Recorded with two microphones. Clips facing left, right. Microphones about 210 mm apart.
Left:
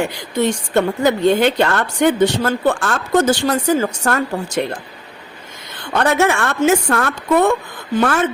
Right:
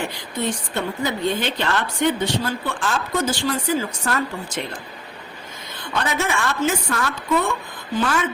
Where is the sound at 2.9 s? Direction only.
75° left (ahead or behind).